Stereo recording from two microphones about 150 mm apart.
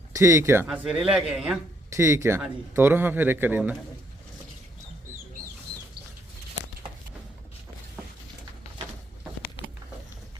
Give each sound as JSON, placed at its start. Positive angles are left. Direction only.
{"t": 0.1, "sound": "speech", "side_deg": -20}
{"t": 0.7, "sound": "a man's voice", "side_deg": -5}
{"t": 1.9, "sound": "a man's voice", "side_deg": -20}